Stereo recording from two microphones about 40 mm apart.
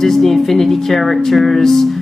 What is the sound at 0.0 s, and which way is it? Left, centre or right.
Speech, centre.